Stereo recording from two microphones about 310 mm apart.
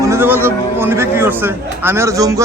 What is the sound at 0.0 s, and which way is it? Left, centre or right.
A man's voice, centre.